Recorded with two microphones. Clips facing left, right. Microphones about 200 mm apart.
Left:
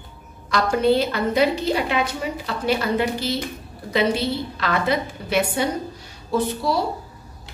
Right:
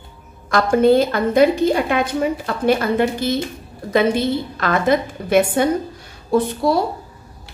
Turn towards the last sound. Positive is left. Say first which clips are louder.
# right 5 dB
turn(degrees=-55)  # may be behind; listen again after turning